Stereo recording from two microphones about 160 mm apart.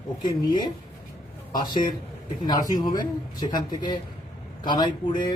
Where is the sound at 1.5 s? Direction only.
25° left (ahead or behind).